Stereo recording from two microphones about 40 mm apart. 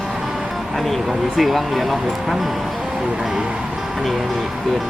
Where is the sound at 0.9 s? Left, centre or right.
Centre.